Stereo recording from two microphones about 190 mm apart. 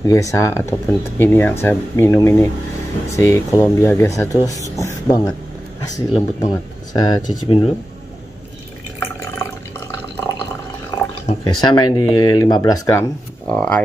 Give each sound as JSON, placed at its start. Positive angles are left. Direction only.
{"t": 0.0, "sound": "speech", "side_deg": 15}
{"t": 9.0, "sound": "drip", "side_deg": 15}
{"t": 11.2, "sound": "speech", "side_deg": 25}
{"t": 13.5, "sound": "speech", "side_deg": 5}